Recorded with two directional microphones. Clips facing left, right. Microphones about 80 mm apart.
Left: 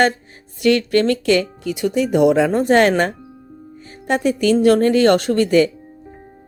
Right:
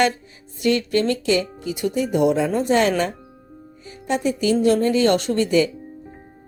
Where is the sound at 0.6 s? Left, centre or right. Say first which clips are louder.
Left 4 dB; left.